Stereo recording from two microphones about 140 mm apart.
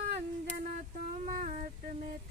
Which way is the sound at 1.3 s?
70° right (ahead or behind).